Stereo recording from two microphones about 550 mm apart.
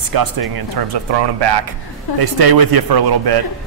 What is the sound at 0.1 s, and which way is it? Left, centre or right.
A man's voice, right.